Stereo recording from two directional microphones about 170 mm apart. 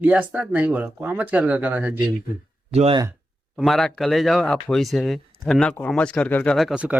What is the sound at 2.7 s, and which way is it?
Speech, 35° right (ahead or behind).